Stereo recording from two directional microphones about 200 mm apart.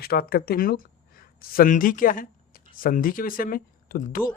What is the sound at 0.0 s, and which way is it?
Speech, 50° left (ahead or behind).